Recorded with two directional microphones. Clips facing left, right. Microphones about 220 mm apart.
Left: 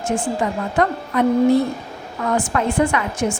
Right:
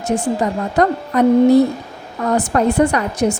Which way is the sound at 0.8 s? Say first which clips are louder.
Right 4 dB; 40° right (ahead or behind).